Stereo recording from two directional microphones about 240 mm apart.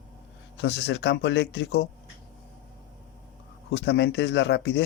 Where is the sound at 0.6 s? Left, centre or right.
Left.